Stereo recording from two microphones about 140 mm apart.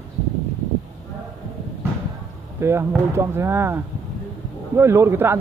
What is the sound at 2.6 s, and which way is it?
A man's voice, 20° right (ahead or behind).